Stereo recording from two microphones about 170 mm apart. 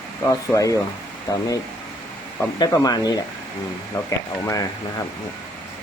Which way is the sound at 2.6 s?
20° left (ahead or behind).